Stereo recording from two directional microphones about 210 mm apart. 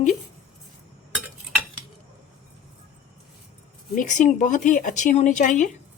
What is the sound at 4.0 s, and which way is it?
Speech, 35° left (ahead or behind).